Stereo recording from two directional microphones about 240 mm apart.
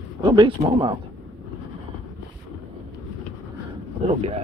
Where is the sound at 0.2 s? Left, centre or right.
Centre.